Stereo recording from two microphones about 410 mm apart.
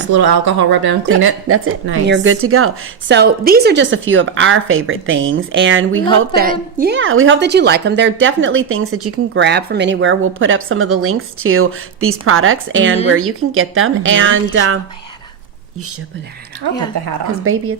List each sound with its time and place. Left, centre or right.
0.1 s speech: right
1.5 s a woman's voice: right
17.4 s a woman's voice: right